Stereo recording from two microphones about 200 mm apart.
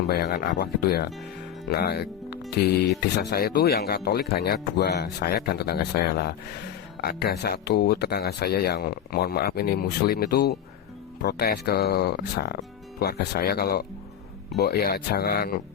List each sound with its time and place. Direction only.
0.1 s speech: 50° left (ahead or behind)